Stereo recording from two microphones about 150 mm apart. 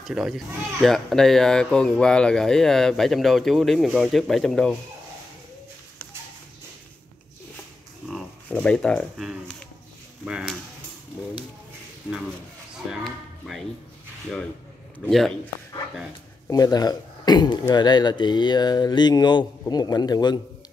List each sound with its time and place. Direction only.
0.0 s speech: centre (ahead or behind)
8.0 s a sound: 5° right (ahead or behind)
8.5 s speech: 10° left (ahead or behind)
9.1 s speech: 5° right (ahead or behind)
12.9 s music: centre (ahead or behind)
15.0 s speech: 5° left (ahead or behind)
16.4 s speech: 25° left (ahead or behind)